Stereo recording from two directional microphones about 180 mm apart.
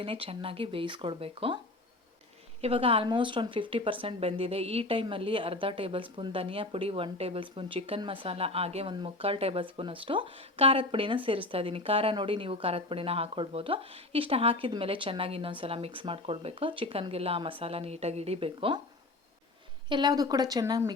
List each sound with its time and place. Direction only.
0.0 s a woman's voice: 30° right (ahead or behind)
2.6 s a woman's voice: 30° right (ahead or behind)
19.9 s a woman's voice: 25° right (ahead or behind)